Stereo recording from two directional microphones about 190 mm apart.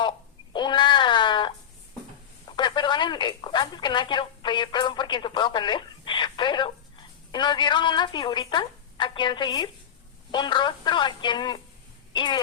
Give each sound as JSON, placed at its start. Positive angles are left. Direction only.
{"t": 0.5, "sound": "cat", "side_deg": 25}
{"t": 2.6, "sound": "speech", "side_deg": 25}